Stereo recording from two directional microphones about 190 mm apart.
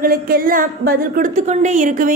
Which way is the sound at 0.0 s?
50° right (ahead or behind).